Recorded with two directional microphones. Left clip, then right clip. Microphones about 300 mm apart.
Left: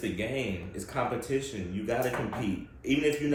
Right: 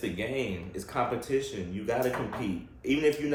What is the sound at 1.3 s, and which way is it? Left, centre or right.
Speech, centre.